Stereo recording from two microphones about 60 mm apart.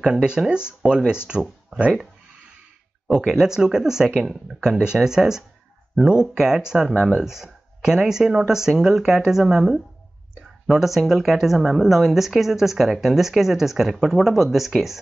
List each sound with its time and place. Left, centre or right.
0.0 s speech: centre
3.1 s speech: centre